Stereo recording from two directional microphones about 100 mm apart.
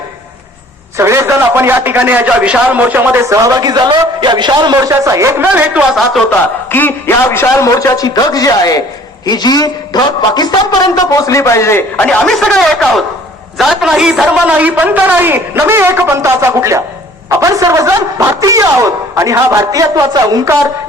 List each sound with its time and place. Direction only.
0.9 s a man's voice: 30° right (ahead or behind)
3.2 s speech: 30° right (ahead or behind)
5.0 s a man's voice: 30° right (ahead or behind)
5.4 s a man's voice: 20° right (ahead or behind)
6.7 s a man's voice: 20° left (ahead or behind)
12.0 s a man's voice: 10° left (ahead or behind); by 20.6 s 30° right (ahead or behind)